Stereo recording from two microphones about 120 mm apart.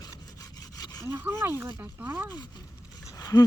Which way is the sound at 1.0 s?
20° right (ahead or behind).